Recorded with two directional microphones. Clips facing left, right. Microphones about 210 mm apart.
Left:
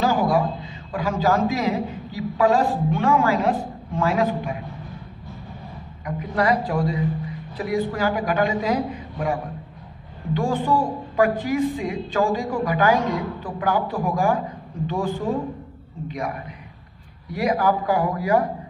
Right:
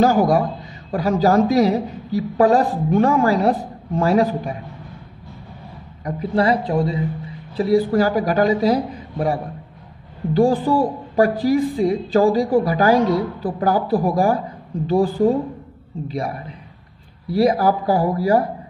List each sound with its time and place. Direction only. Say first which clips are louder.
0.0 s a man's voice: right 5 dB; 45° right (ahead or behind)
6.0 s a woman's voice: right 4 dB; 30° right (ahead or behind)